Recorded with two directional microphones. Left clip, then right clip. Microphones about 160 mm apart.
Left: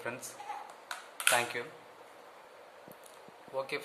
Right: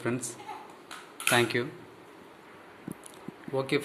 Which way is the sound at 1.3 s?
15° right (ahead or behind).